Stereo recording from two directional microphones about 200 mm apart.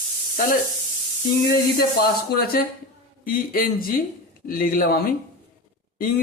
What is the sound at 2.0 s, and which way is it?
Speech, 50° left (ahead or behind).